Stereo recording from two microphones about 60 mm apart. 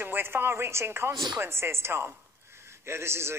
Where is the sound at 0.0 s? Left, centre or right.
Right.